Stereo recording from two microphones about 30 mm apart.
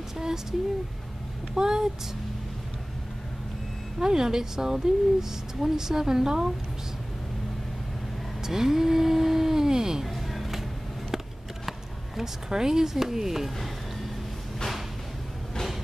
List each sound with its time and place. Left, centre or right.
0.2 s a woman's voice: centre
4.0 s a woman's voice: right
8.4 s a sound: centre
10.0 s music: centre
12.2 s a woman's voice: centre